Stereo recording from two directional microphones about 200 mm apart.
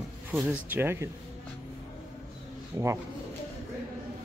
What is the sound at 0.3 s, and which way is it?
Speech, 10° right (ahead or behind).